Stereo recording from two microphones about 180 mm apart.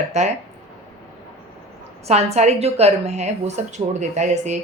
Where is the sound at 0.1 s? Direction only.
40° right (ahead or behind).